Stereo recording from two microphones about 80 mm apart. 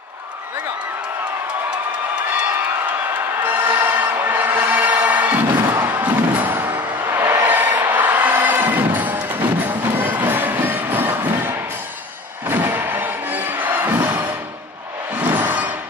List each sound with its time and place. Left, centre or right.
3.4 s music: right
15.2 s music: right